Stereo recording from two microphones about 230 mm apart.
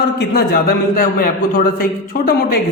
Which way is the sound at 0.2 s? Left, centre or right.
Left.